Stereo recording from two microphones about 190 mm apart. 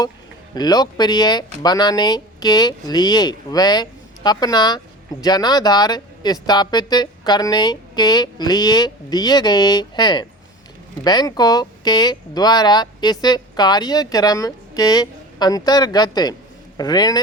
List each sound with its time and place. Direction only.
0.5 s a man's voice: 20° left (ahead or behind)